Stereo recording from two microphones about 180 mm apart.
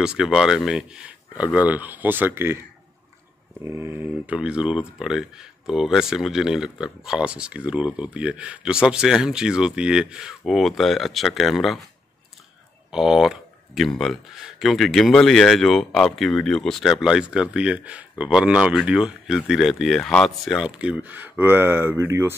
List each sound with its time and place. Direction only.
0.0 s speech: 5° right (ahead or behind)
3.6 s speech: 15° right (ahead or behind)
12.9 s speech: centre (ahead or behind)